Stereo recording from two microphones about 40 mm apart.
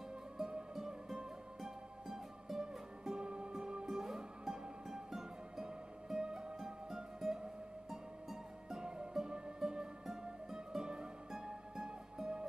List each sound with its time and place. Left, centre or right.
0.4 s music: centre
3.8 s music: centre